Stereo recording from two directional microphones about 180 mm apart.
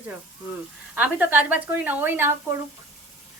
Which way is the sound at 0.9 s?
10° right (ahead or behind).